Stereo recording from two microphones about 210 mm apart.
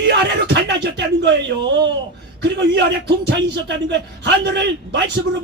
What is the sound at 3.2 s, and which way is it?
A man's voice, 55° right (ahead or behind).